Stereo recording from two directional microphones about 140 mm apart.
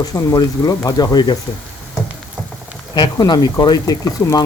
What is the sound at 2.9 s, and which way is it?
Speech, 35° left (ahead or behind).